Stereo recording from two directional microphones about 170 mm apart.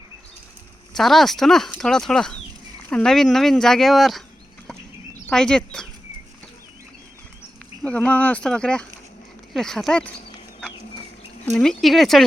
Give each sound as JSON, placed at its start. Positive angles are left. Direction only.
{"t": 0.9, "sound": "speech", "side_deg": 0}
{"t": 5.3, "sound": "speech", "side_deg": 5}
{"t": 7.8, "sound": "speech", "side_deg": 5}
{"t": 11.5, "sound": "speech", "side_deg": 5}